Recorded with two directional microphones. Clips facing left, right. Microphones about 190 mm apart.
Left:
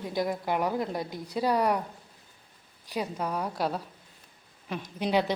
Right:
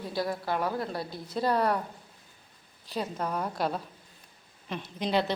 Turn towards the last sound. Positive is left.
turn(degrees=10)  # may be behind; listen again after turning